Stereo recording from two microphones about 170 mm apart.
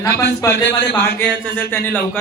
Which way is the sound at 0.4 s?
20° left (ahead or behind).